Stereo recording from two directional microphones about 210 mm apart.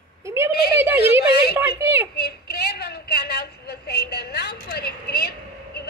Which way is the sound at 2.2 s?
50° left (ahead or behind).